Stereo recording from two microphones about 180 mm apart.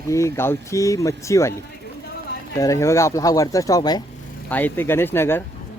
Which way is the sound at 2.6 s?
15° left (ahead or behind).